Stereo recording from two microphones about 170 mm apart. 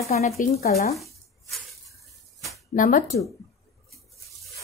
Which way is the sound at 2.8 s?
55° left (ahead or behind).